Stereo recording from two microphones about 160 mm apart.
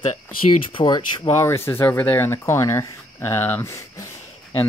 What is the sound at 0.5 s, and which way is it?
Speech, 30° left (ahead or behind).